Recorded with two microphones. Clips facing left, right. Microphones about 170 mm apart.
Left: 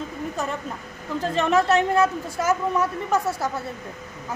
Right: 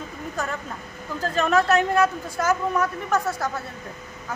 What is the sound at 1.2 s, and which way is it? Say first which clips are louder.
A woman's voice: even; 25° left (ahead or behind).